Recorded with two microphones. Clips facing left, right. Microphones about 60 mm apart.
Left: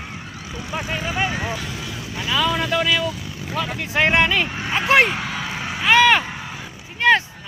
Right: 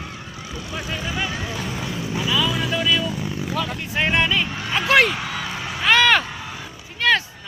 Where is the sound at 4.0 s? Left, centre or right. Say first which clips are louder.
Left 3 dB; left.